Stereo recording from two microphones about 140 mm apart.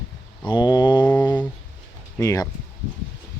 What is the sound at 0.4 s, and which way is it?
Mantra, 30° left (ahead or behind).